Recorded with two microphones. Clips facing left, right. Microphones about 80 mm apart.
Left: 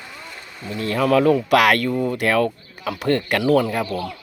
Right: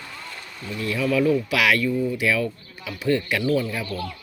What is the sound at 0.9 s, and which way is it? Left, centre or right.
Speech, left.